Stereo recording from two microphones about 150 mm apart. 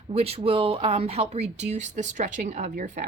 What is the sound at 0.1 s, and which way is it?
A woman's voice, 40° right (ahead or behind).